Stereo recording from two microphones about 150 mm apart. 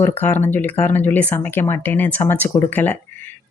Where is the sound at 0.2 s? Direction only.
10° left (ahead or behind).